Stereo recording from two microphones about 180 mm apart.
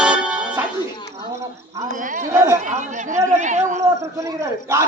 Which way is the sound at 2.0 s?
45° right (ahead or behind).